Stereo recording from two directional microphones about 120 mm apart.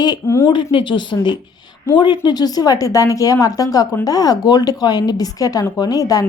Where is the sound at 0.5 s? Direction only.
45° left (ahead or behind).